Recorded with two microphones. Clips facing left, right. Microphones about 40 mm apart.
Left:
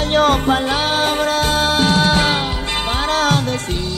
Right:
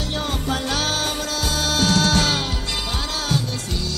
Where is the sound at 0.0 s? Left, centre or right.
Left.